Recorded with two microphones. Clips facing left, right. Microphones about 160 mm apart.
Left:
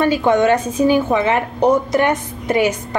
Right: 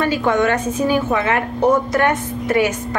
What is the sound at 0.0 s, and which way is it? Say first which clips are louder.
A woman's voice: left 3 dB; 20° left (ahead or behind).